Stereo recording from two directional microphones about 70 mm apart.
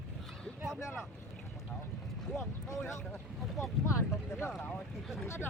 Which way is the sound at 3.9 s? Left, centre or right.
Left.